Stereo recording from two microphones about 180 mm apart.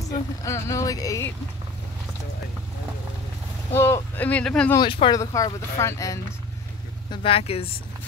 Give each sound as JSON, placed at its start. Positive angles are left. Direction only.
{"t": 0.4, "sound": "speech", "side_deg": 15}
{"t": 3.7, "sound": "speech", "side_deg": 15}
{"t": 4.7, "sound": "speech", "side_deg": 30}
{"t": 5.2, "sound": "speech", "side_deg": 15}
{"t": 7.1, "sound": "speech", "side_deg": 30}